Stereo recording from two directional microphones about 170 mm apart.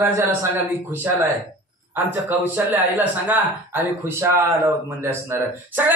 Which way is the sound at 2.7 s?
10° right (ahead or behind).